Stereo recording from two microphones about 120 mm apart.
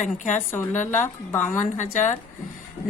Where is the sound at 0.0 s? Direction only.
90° left.